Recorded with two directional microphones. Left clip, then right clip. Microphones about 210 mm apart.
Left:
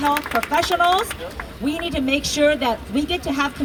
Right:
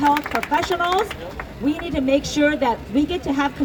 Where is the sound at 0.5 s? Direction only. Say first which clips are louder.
Left 2 dB; 30° left (ahead or behind).